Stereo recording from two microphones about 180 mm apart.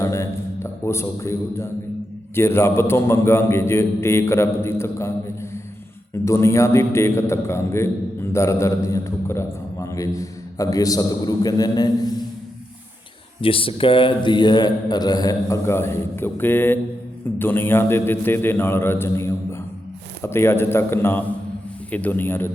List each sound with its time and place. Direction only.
0.0 s a man's voice: 15° left (ahead or behind)
13.4 s a man's voice: 30° left (ahead or behind); by 22.4 s 10° left (ahead or behind)